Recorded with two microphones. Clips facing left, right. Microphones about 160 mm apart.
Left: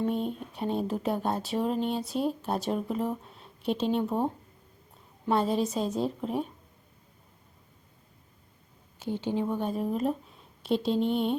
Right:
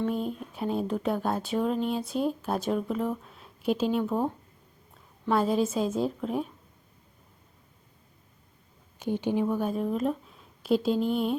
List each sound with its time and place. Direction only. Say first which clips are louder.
0.1 s speech: even; centre (ahead or behind)
5.3 s speech: right 1 dB; centre (ahead or behind)
9.0 s speech: right 3 dB; 15° right (ahead or behind)
9.6 s a woman's voice: right 1 dB; centre (ahead or behind)